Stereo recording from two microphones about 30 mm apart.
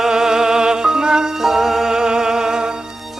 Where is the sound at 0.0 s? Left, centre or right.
Right.